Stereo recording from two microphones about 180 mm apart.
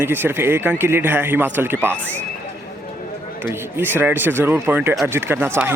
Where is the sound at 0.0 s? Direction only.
10° right (ahead or behind).